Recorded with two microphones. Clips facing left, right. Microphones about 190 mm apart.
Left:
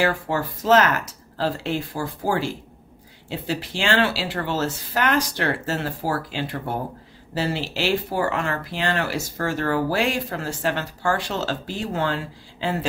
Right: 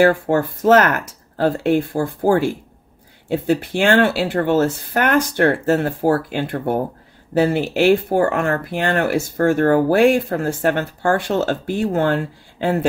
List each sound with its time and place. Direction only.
0.0 s speech: 55° right (ahead or behind)